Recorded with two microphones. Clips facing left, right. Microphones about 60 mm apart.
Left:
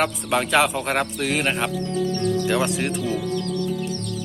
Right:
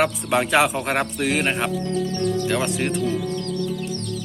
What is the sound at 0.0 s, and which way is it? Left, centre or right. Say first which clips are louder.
Speech: right 2 dB; centre.